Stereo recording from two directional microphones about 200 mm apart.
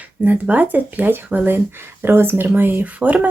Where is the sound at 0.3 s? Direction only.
10° right (ahead or behind).